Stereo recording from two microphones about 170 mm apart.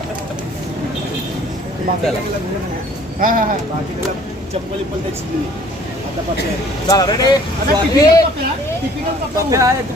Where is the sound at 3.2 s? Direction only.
55° right (ahead or behind).